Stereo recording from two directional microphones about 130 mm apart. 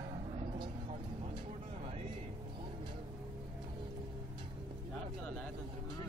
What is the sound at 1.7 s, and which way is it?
Music, 55° right (ahead or behind).